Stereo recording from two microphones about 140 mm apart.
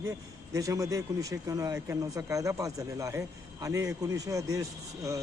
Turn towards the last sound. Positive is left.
turn(degrees=-25)  # may be behind; listen again after turning